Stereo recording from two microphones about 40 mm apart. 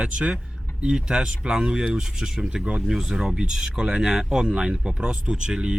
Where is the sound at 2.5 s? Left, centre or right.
Right.